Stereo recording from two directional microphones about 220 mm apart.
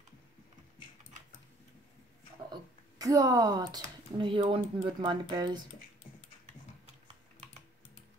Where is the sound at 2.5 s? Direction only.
15° right (ahead or behind).